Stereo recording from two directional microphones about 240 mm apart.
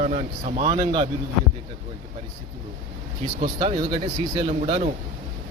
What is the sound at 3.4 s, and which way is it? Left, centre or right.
Speech, right.